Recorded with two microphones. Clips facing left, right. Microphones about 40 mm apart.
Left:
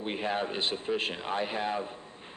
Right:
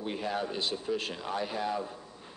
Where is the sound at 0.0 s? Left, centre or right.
Left.